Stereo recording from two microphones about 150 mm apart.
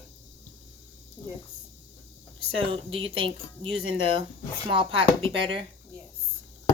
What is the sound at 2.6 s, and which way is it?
Speech, 35° right (ahead or behind).